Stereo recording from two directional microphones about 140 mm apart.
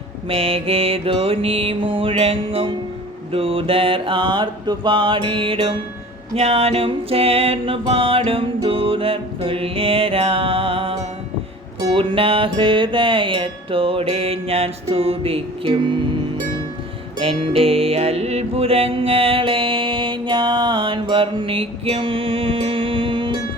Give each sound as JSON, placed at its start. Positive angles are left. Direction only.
{"t": 0.3, "sound": "music", "side_deg": -45}
{"t": 11.9, "sound": "music", "side_deg": -40}
{"t": 17.2, "sound": "music", "side_deg": -45}